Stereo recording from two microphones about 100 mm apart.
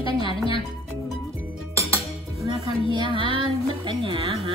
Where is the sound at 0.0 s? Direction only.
60° left (ahead or behind).